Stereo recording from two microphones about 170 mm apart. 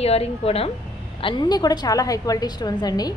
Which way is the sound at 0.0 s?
35° left (ahead or behind).